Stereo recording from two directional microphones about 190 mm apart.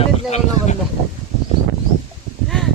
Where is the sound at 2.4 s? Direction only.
Centre (ahead or behind).